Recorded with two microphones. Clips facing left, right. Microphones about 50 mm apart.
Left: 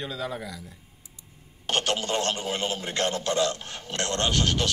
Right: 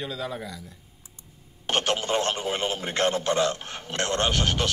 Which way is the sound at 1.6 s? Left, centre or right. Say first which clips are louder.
Right 1 dB; centre.